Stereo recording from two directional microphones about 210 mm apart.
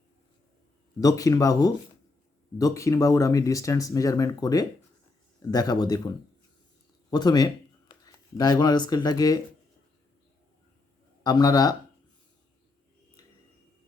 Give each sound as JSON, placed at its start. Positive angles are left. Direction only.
{"t": 1.0, "sound": "speech", "side_deg": 15}
{"t": 11.2, "sound": "speech", "side_deg": 20}